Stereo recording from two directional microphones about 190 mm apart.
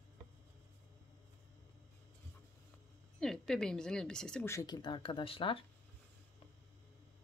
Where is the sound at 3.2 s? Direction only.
5° left (ahead or behind).